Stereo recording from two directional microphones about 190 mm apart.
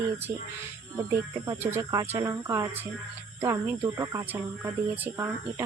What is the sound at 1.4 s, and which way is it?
Speech, 15° right (ahead or behind).